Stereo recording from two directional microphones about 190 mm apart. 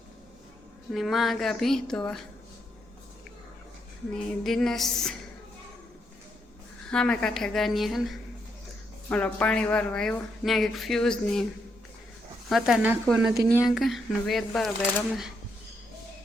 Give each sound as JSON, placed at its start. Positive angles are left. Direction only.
{"t": 0.9, "sound": "speech", "side_deg": 0}
{"t": 4.1, "sound": "speech", "side_deg": 0}
{"t": 6.9, "sound": "speech", "side_deg": 5}
{"t": 12.5, "sound": "speech", "side_deg": 0}
{"t": 13.3, "sound": "speech", "side_deg": -15}
{"t": 13.7, "sound": "speech", "side_deg": 0}